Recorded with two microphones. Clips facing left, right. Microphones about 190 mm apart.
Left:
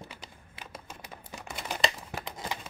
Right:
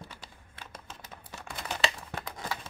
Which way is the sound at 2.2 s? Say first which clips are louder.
Even; 20° left (ahead or behind).